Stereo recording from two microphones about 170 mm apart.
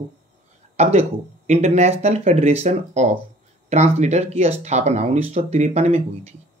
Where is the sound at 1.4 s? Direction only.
40° right (ahead or behind).